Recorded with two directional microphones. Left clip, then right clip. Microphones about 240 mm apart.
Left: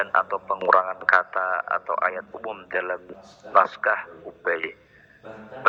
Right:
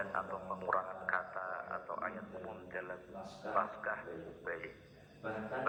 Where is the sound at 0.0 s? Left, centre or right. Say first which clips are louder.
Left 17 dB; left.